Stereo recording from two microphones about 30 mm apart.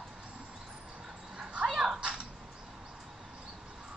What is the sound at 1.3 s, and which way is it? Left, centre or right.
Dog, right.